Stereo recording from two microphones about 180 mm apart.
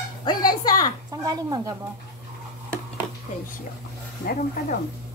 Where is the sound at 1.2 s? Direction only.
20° right (ahead or behind).